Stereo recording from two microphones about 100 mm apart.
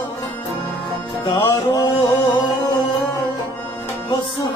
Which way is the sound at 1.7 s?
45° left (ahead or behind).